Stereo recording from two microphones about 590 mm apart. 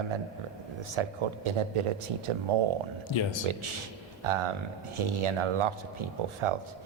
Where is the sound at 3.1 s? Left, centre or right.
Left.